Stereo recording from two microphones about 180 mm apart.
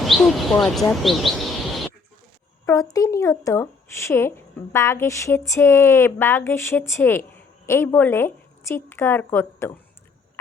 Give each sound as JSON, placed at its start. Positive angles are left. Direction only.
{"t": 0.0, "sound": "bird", "side_deg": 0}
{"t": 1.0, "sound": "speech", "side_deg": 0}
{"t": 2.9, "sound": "speech", "side_deg": 20}